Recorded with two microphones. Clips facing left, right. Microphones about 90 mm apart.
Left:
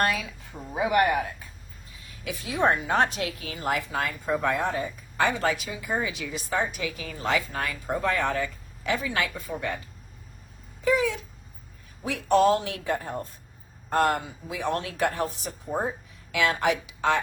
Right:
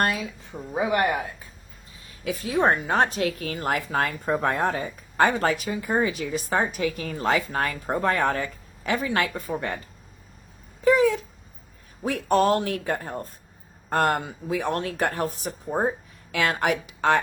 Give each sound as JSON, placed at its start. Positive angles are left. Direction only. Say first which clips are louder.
{"t": 0.8, "sound": "a woman's voice", "louder": "left 1 dB", "side_deg": -30}
{"t": 3.5, "sound": "speech", "louder": "right 2 dB", "side_deg": -50}
{"t": 10.8, "sound": "speech", "louder": "right 5 dB", "side_deg": -40}